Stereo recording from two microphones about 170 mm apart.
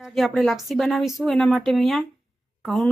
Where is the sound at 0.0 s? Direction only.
Centre (ahead or behind).